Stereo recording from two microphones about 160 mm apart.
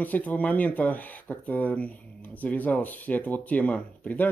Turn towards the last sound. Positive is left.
turn(degrees=10)  # may be behind; listen again after turning